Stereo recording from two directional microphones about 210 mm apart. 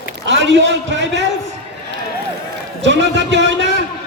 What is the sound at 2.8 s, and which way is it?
Speech, 60° right (ahead or behind).